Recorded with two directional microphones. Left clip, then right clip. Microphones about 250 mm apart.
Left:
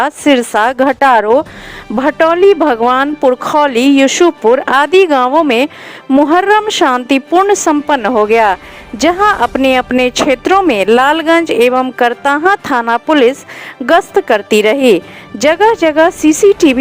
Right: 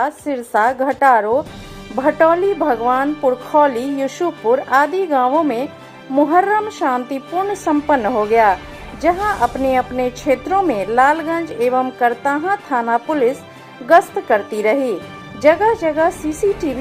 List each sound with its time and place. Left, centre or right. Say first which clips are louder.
0.0 s a woman's voice: left 10 dB; left